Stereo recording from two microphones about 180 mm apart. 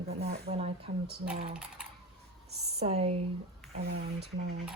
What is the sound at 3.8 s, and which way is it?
Speech, 65° right (ahead or behind).